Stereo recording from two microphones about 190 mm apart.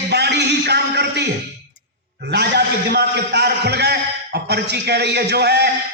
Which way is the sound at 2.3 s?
60° right (ahead or behind).